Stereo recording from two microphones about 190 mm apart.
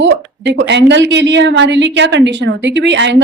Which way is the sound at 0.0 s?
70° right (ahead or behind).